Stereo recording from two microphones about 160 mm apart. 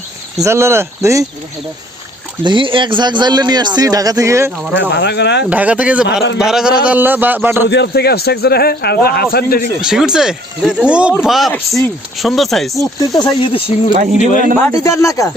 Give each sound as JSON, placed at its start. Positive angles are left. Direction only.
{"t": 0.4, "sound": "a man's voice", "side_deg": -15}
{"t": 2.4, "sound": "a man's voice", "side_deg": -30}
{"t": 4.9, "sound": "speech", "side_deg": 90}
{"t": 5.5, "sound": "a man's voice", "side_deg": -10}
{"t": 7.7, "sound": "a man's voice", "side_deg": 90}
{"t": 9.8, "sound": "speech", "side_deg": -5}
{"t": 13.1, "sound": "speech", "side_deg": 30}
{"t": 14.2, "sound": "a man's voice", "side_deg": 55}
{"t": 14.6, "sound": "speech", "side_deg": 20}